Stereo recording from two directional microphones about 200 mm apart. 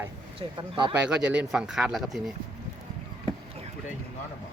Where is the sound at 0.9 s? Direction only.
5° right (ahead or behind).